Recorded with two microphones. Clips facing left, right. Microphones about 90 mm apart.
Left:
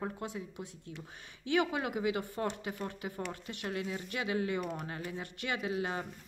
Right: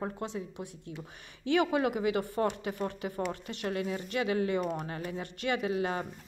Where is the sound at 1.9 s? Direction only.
20° left (ahead or behind).